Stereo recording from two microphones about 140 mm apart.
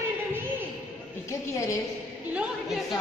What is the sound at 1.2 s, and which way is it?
Speech, 20° left (ahead or behind).